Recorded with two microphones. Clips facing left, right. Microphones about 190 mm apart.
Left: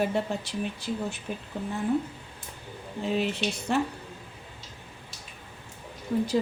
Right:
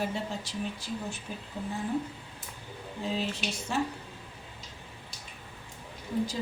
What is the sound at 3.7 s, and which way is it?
Speech, 60° left (ahead or behind).